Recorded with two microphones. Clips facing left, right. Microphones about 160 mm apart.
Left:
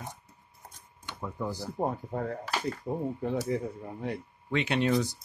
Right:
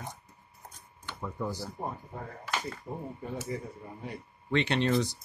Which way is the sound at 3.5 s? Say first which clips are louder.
Left 6 dB; 90° left.